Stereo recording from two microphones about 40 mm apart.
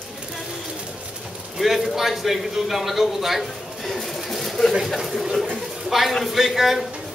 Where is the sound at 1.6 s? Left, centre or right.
Centre.